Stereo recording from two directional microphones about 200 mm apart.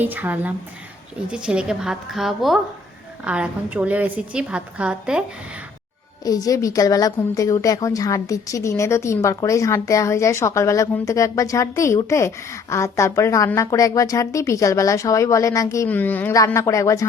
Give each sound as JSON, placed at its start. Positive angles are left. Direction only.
{"t": 0.0, "sound": "a woman's voice", "side_deg": -10}
{"t": 6.2, "sound": "a woman's voice", "side_deg": 20}